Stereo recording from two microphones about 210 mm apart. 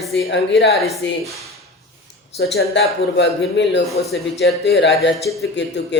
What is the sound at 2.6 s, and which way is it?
A man's voice, 55° left (ahead or behind).